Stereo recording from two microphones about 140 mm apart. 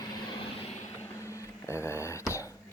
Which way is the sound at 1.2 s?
20° left (ahead or behind).